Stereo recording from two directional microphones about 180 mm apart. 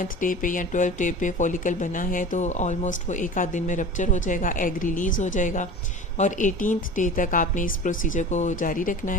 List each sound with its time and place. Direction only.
0.0 s speech: 50° left (ahead or behind)